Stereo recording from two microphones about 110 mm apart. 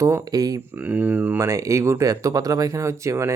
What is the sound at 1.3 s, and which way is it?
Speech, 30° right (ahead or behind).